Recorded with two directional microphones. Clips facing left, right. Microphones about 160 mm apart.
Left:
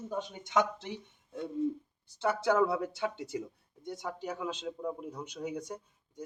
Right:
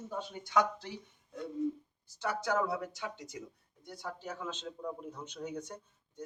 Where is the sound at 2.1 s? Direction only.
25° left (ahead or behind).